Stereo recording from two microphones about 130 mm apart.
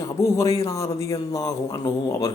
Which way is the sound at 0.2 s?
25° left (ahead or behind).